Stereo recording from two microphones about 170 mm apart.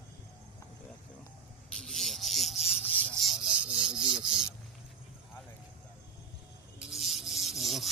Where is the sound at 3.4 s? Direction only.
30° right (ahead or behind).